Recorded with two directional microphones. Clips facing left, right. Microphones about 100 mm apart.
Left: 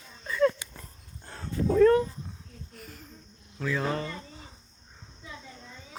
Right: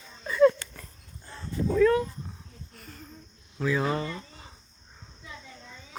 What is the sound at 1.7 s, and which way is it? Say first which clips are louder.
Cat: left 2 dB; 40° left (ahead or behind).